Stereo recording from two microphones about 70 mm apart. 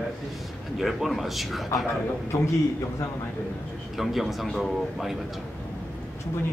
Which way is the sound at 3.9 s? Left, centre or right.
Centre.